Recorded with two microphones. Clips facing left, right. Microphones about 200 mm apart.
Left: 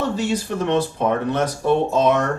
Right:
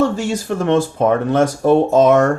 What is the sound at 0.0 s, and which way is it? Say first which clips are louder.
Speech: right 4 dB; 45° right (ahead or behind).